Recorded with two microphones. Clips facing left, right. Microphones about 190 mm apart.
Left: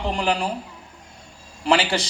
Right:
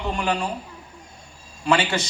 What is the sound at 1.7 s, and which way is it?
Speech, 30° left (ahead or behind).